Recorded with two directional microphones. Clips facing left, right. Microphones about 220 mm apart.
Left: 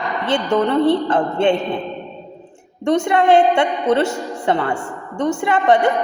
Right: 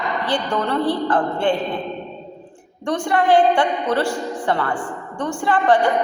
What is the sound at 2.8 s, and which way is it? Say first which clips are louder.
A woman's voice: left 4 dB; 25° left (ahead or behind).